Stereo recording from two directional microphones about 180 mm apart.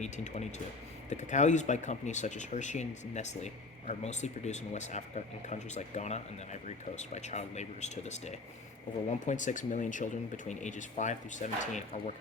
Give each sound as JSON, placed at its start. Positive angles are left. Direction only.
{"t": 1.1, "sound": "speech", "side_deg": 40}